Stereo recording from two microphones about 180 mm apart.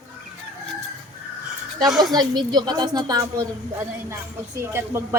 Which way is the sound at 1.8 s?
25° right (ahead or behind).